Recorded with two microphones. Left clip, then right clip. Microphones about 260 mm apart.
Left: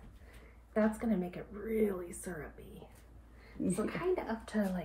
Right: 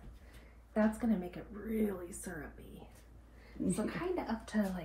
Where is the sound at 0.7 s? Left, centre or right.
Left.